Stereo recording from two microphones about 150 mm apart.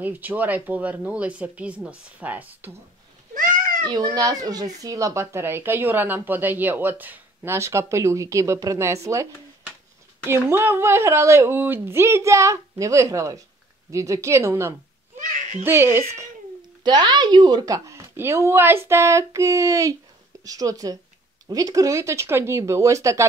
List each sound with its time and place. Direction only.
0.0 s speech: 10° right (ahead or behind)
3.3 s a sound: 65° right (ahead or behind)
3.8 s speech: 25° right (ahead or behind)
15.1 s a sound: 55° right (ahead or behind)
15.6 s speech: 15° right (ahead or behind)
16.8 s speech: 30° right (ahead or behind)